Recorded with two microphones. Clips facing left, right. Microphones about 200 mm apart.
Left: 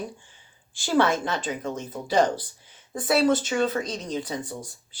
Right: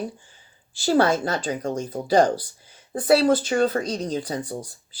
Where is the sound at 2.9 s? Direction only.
35° right (ahead or behind).